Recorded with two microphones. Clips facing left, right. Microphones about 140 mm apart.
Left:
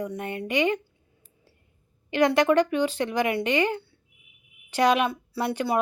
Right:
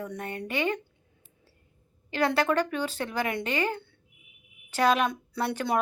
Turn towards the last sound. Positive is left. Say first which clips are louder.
# left 2 dB
turn(degrees=10)  # may be behind; listen again after turning